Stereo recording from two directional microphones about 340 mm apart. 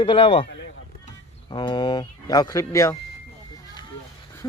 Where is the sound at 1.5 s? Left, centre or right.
Centre.